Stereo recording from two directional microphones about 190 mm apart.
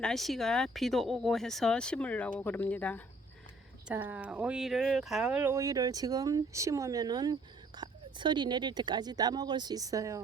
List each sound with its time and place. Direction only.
0.0 s speech: centre (ahead or behind)
3.8 s speech: 10° right (ahead or behind)